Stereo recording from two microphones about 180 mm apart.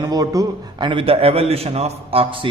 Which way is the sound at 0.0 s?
20° right (ahead or behind).